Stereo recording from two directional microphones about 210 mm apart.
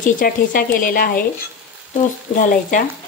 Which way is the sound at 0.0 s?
40° left (ahead or behind).